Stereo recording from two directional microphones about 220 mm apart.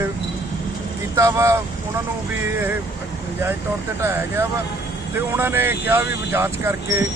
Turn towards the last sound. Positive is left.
turn(degrees=-10)  # may be behind; listen again after turning